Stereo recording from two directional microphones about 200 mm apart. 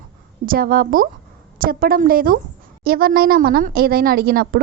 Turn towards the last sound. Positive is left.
turn(degrees=-50)  # may be behind; listen again after turning